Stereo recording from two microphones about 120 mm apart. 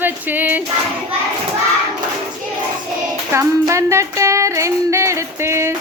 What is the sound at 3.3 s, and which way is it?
Music, 25° right (ahead or behind).